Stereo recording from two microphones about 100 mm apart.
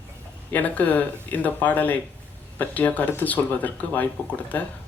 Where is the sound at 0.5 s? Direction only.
15° left (ahead or behind).